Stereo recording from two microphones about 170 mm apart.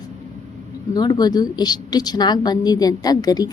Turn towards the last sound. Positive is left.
turn(degrees=25)  # may be behind; listen again after turning